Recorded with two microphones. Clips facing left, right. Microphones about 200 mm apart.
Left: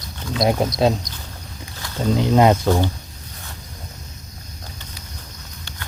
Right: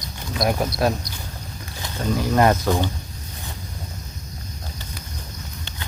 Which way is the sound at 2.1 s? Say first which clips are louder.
Left 3 dB; 20° left (ahead or behind).